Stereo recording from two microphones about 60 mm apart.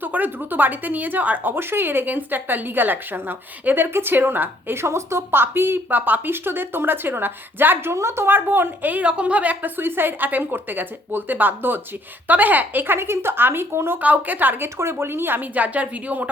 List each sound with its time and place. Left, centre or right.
0.0 s a woman's voice: right
1.5 s a woman's voice: right
7.9 s a woman's voice: right
14.0 s speech: right
14.8 s speech: right